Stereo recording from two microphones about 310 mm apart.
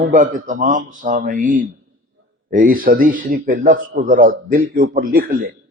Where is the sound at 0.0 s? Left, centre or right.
Right.